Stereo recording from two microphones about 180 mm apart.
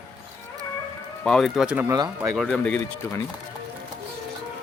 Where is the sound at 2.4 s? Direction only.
5° left (ahead or behind).